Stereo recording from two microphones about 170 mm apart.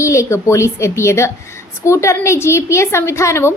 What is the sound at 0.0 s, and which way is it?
A woman's voice, 15° left (ahead or behind).